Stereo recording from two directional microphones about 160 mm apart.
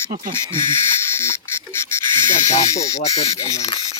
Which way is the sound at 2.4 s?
45° left (ahead or behind).